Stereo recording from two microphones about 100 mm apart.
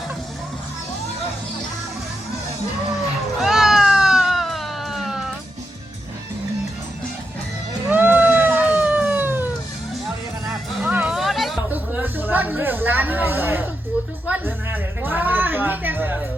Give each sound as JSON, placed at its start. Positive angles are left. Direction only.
{"t": 3.4, "sound": "cat", "side_deg": -5}
{"t": 7.9, "sound": "music", "side_deg": -20}
{"t": 10.8, "sound": "music", "side_deg": -15}
{"t": 11.1, "sound": "music", "side_deg": 0}
{"t": 11.7, "sound": "a sound", "side_deg": -20}